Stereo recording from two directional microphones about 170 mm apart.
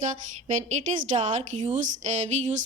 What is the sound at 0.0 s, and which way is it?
Speech, 40° right (ahead or behind).